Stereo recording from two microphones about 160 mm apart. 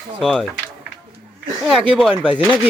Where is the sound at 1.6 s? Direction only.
Centre (ahead or behind).